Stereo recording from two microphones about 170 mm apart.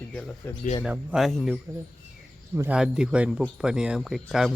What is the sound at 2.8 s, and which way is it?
Speech, 5° right (ahead or behind).